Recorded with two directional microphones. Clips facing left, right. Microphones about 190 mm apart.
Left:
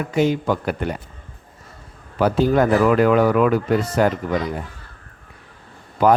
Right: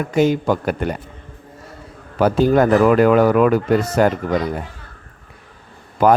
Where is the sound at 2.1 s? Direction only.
45° right (ahead or behind).